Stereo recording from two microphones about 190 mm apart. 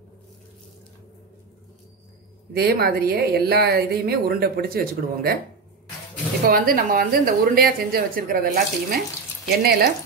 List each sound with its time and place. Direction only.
2.5 s a woman's voice: 55° right (ahead or behind)
6.4 s a woman's voice: 50° right (ahead or behind)